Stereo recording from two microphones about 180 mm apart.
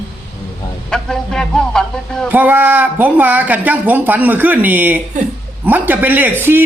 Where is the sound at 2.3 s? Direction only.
10° right (ahead or behind).